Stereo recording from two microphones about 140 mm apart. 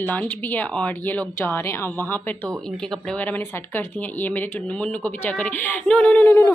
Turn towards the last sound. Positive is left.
turn(degrees=10)  # may be behind; listen again after turning